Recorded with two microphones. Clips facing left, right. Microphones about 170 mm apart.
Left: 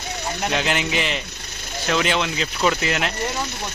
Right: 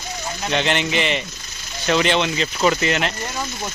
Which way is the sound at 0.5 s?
5° left (ahead or behind).